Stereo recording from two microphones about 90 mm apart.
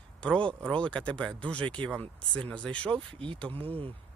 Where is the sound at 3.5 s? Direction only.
90° right.